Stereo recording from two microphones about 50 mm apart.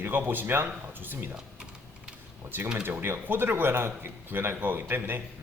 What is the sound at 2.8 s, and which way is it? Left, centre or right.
A man's voice, right.